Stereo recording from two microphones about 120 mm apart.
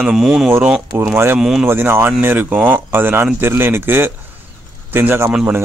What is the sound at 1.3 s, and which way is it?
Speech, 5° right (ahead or behind).